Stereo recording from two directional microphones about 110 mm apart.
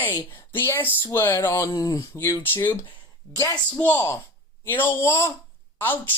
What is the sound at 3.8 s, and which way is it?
Speech, 20° left (ahead or behind).